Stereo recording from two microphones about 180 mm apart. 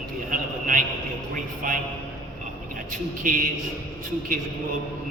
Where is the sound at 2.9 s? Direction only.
45° right (ahead or behind).